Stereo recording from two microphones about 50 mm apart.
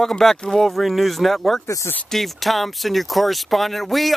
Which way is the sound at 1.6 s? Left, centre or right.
Left.